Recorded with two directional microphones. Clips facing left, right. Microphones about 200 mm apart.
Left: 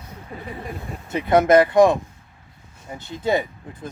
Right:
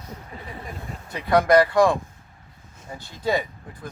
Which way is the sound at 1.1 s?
20° left (ahead or behind).